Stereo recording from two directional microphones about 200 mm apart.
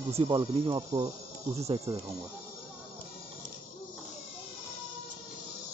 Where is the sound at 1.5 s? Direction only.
30° right (ahead or behind).